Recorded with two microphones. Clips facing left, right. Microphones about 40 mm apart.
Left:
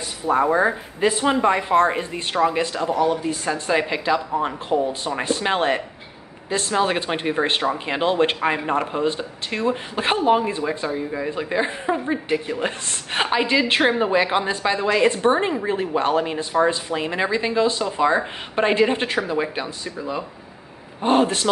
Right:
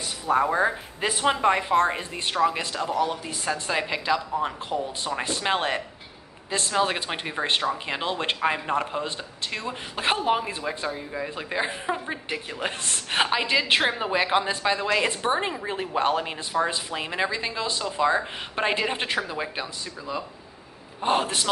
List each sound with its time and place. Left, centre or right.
0.3 s a woman's voice: centre
18.6 s a woman's voice: centre
21.0 s speech: centre